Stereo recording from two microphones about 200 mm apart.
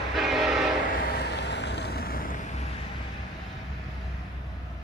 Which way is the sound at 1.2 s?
55° left (ahead or behind).